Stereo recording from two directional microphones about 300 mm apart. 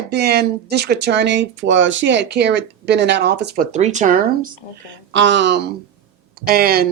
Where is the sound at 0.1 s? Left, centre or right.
Right.